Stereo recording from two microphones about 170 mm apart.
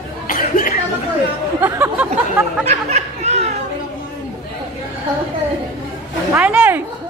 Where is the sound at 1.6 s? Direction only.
15° right (ahead or behind).